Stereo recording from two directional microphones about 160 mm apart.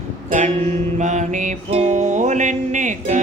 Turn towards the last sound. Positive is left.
turn(degrees=-50)  # may be behind; listen again after turning